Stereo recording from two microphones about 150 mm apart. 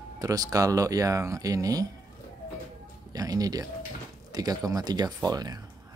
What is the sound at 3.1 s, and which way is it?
Speech, 25° right (ahead or behind).